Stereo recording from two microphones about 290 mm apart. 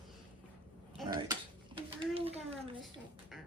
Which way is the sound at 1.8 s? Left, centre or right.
Centre.